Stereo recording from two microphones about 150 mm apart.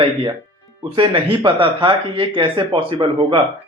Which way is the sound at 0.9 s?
35° right (ahead or behind).